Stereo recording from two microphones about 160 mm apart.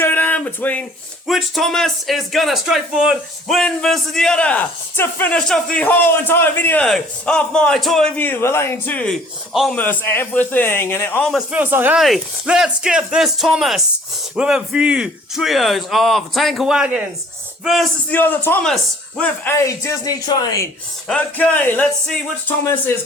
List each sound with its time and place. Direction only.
0.0 s a sound: 10° left (ahead or behind)
1.3 s speech: centre (ahead or behind)
9.5 s speech: centre (ahead or behind)
9.7 s a man's voice: 10° left (ahead or behind)
11.3 s speech: 5° right (ahead or behind)
18.1 s a man's voice: 10° left (ahead or behind)
19.5 s speech: 15° left (ahead or behind)
21.1 s a man's voice: 10° left (ahead or behind)